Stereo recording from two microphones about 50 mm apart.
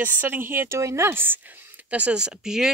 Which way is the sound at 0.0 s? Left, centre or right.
Right.